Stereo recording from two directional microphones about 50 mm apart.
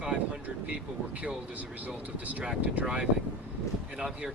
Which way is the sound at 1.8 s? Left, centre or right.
Right.